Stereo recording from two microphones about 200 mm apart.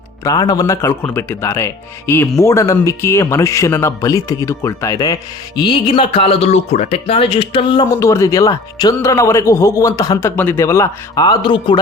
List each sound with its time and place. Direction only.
0.3 s speech: 20° left (ahead or behind)